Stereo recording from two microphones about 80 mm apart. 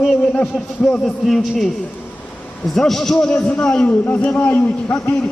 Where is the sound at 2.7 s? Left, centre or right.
Centre; by 5.1 s left.